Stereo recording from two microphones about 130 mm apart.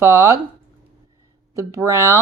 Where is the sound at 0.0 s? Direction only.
20° right (ahead or behind).